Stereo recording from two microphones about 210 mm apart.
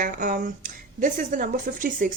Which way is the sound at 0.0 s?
40° right (ahead or behind).